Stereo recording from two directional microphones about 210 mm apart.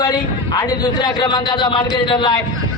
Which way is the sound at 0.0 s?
20° left (ahead or behind).